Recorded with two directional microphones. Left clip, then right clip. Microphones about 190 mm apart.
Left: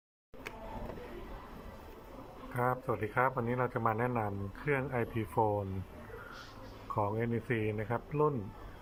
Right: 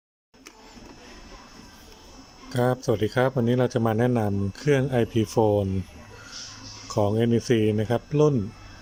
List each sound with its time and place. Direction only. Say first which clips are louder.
2.5 s speech: right 9 dB; 30° right (ahead or behind)
6.9 s speech: right 11 dB; 30° right (ahead or behind)